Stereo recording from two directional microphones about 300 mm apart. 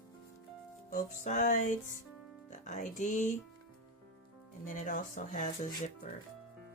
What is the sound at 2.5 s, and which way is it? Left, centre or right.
Music, left.